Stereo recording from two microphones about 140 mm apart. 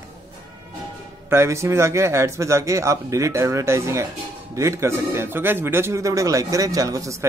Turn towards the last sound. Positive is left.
turn(degrees=-20)  # may be behind; listen again after turning